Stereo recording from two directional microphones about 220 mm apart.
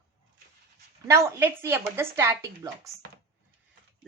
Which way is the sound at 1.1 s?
10° right (ahead or behind).